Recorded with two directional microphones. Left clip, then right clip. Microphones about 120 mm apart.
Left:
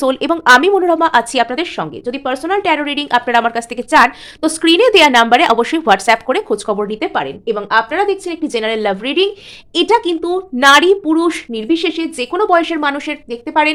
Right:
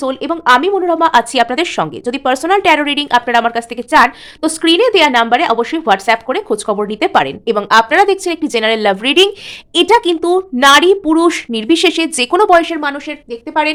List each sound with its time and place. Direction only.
0.0 s speech: 10° left (ahead or behind)
0.9 s speech: 5° right (ahead or behind)
1.5 s speech: 25° right (ahead or behind); by 6.4 s 5° left (ahead or behind)
6.5 s speech: 10° right (ahead or behind)
7.1 s a woman's voice: 35° right (ahead or behind)
10.6 s speech: 10° right (ahead or behind)
11.0 s a woman's voice: 25° right (ahead or behind)
11.7 s a woman's voice: 40° right (ahead or behind)
12.8 s a woman's voice: 25° left (ahead or behind)